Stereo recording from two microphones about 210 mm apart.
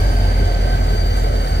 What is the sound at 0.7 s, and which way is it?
Vehicle, 55° left (ahead or behind).